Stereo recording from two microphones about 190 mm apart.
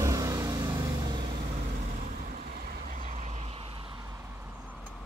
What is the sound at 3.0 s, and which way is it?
Vehicle, 35° right (ahead or behind).